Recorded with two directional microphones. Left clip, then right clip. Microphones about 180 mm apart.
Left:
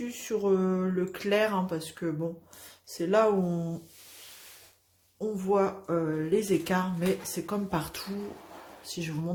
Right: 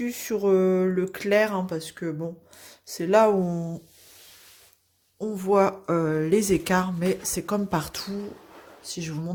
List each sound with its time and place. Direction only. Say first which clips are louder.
0.0 s speech: right 4 dB; 45° right (ahead or behind)
3.5 s a sound: right 2 dB; 25° right (ahead or behind)
5.2 s speech: right 5 dB; 45° right (ahead or behind); by 9.3 s 30° right (ahead or behind)